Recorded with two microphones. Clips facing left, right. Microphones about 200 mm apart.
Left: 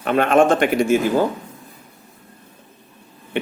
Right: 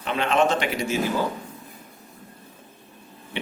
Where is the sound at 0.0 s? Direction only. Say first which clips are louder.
Left 7 dB; 50° left (ahead or behind).